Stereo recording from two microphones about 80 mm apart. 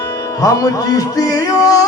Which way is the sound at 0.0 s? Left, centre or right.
Left.